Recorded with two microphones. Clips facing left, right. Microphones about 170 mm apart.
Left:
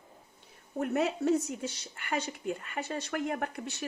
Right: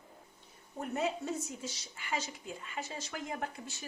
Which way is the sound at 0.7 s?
70° left (ahead or behind).